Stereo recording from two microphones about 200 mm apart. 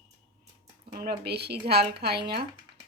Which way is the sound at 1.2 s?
55° right (ahead or behind).